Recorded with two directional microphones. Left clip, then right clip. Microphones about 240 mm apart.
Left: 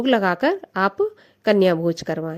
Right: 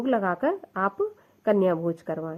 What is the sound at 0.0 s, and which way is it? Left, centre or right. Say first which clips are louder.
A woman's voice: left 6 dB; left.